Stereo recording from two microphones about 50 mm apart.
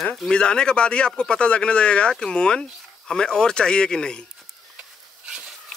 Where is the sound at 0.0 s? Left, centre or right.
Centre.